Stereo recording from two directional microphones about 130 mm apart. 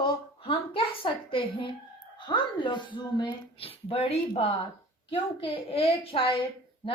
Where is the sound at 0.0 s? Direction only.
40° left (ahead or behind).